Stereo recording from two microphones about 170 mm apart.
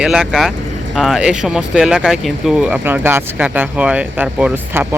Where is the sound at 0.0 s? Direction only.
5° right (ahead or behind).